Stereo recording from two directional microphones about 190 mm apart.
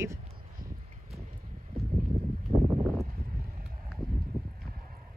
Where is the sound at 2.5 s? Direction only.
30° right (ahead or behind).